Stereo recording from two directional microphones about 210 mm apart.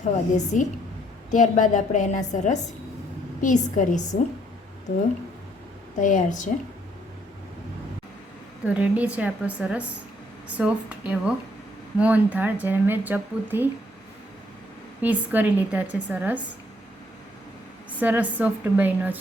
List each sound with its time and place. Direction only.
0.0 s a woman's voice: 35° left (ahead or behind)
6.0 s a woman's voice: 35° left (ahead or behind)
8.6 s speech: 5° right (ahead or behind)
15.0 s speech: 10° right (ahead or behind)
17.9 s speech: 10° right (ahead or behind)